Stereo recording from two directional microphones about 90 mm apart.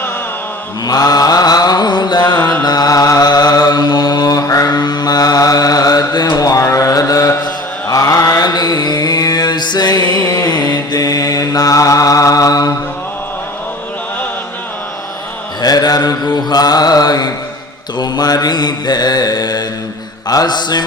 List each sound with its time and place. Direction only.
0.9 s mantra: 45° left (ahead or behind)
2.4 s mantra: 15° left (ahead or behind)
2.6 s mantra: 45° left (ahead or behind)
4.7 s mantra: 55° left (ahead or behind); by 10.5 s 40° left (ahead or behind)
10.5 s mantra: 50° left (ahead or behind)
15.6 s mantra: 45° left (ahead or behind)